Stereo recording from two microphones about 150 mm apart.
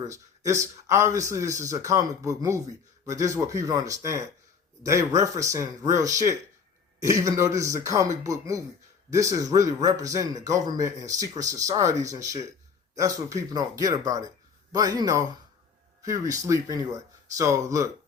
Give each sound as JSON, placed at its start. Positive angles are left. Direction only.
{"t": 0.1, "sound": "a man's voice", "side_deg": -20}